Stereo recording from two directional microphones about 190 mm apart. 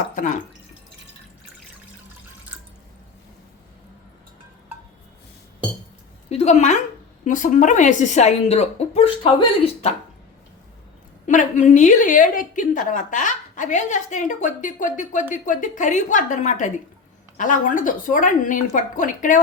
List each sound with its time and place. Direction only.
0.1 s drip: 40° left (ahead or behind)
6.2 s a woman's voice: 35° left (ahead or behind)
11.3 s a woman's voice: 40° left (ahead or behind)